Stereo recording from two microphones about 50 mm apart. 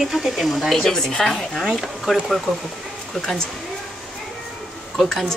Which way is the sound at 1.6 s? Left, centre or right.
Centre.